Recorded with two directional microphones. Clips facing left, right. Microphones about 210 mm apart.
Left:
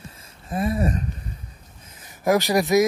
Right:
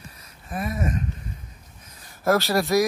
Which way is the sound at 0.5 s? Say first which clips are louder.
Left 4 dB; 30° left (ahead or behind).